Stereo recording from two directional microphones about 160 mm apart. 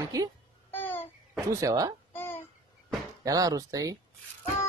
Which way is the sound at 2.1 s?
15° left (ahead or behind).